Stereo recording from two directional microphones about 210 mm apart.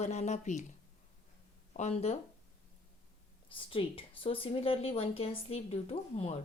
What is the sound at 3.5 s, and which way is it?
A woman's voice, 25° left (ahead or behind).